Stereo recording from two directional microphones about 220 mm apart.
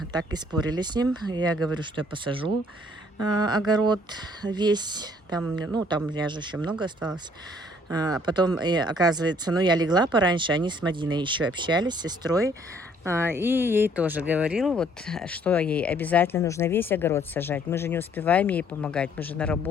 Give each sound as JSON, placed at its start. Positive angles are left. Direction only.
{"t": 0.1, "sound": "speech", "side_deg": -20}
{"t": 5.4, "sound": "speech", "side_deg": -5}
{"t": 6.1, "sound": "speech", "side_deg": -20}